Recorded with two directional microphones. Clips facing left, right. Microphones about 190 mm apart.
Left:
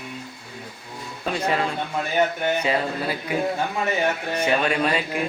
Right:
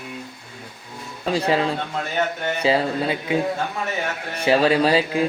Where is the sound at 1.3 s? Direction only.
30° right (ahead or behind).